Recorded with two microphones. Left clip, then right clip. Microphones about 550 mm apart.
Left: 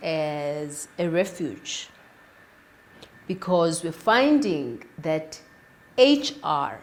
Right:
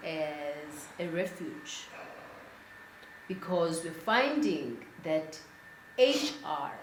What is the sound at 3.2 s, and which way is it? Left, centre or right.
Speech, left.